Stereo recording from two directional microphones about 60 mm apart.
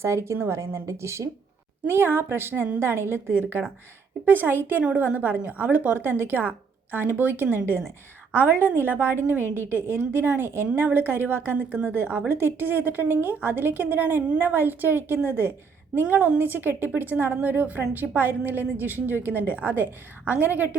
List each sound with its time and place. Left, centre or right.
0.0 s a woman's voice: right
1.9 s a woman's voice: right